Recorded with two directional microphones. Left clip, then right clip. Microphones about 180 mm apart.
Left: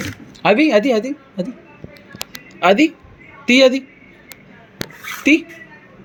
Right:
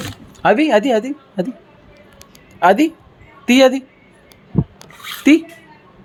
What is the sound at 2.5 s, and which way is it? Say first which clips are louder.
A woman's voice: right 1 dB; 40° right (ahead or behind).